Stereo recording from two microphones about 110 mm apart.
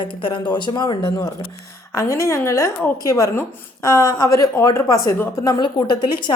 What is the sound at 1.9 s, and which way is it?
A woman's voice, 25° left (ahead or behind).